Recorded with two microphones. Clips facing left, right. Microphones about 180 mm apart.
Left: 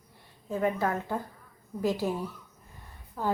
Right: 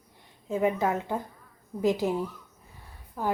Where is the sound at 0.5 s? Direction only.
15° right (ahead or behind).